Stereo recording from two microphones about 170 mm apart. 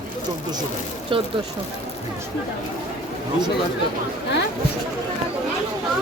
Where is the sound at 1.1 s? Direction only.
30° right (ahead or behind).